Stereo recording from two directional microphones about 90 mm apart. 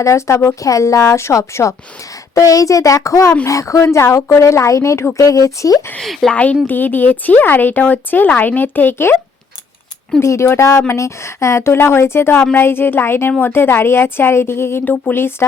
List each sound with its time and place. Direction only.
0.0 s a woman's voice: 35° left (ahead or behind)
6.0 s speech: centre (ahead or behind)
6.3 s speech: 15° left (ahead or behind)
10.2 s a woman's voice: 30° left (ahead or behind)